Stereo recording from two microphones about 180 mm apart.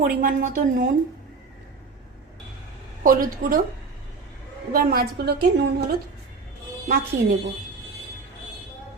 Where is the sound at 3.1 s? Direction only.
50° right (ahead or behind).